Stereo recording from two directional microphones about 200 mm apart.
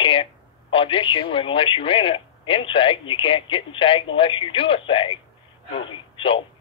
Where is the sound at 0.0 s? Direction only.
25° left (ahead or behind).